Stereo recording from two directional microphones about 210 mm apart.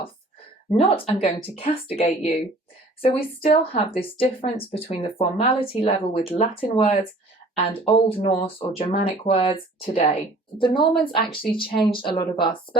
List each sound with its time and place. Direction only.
0.8 s speech: 30° left (ahead or behind)